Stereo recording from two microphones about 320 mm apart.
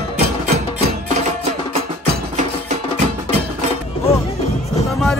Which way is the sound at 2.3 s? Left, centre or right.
Right.